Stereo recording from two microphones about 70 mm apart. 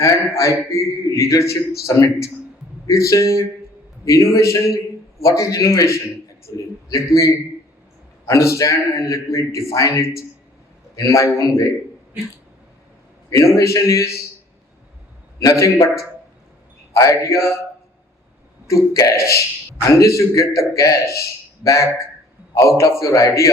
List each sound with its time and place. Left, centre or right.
0.0 s a man's voice: left
13.3 s a man's voice: left
15.4 s a man's voice: left
18.7 s a man's voice: left